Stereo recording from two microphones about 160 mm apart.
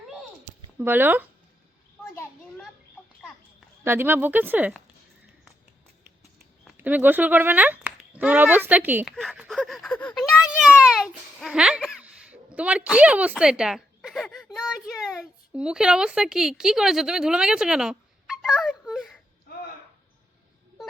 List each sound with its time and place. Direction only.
0.8 s speech: 10° right (ahead or behind)
3.8 s speech: 15° right (ahead or behind)
6.7 s speech: 10° right (ahead or behind)
9.1 s a sound: 5° right (ahead or behind)
12.5 s speech: 10° right (ahead or behind)